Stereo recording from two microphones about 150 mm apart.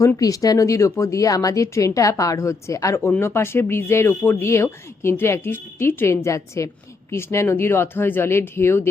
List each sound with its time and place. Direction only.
0.2 s speech: 25° left (ahead or behind)